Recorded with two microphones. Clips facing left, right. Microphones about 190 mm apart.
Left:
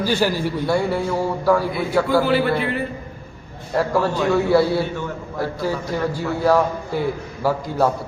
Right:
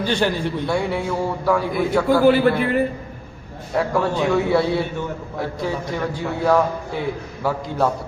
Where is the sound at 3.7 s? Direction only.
Centre (ahead or behind).